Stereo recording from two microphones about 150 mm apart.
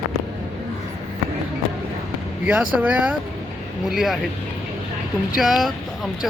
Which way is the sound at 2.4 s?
10° right (ahead or behind).